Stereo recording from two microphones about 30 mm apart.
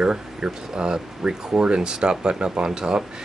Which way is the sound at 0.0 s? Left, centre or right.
Right.